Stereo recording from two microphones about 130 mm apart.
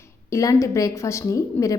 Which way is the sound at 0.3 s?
25° left (ahead or behind).